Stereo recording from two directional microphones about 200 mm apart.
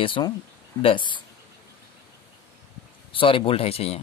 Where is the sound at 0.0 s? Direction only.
25° left (ahead or behind).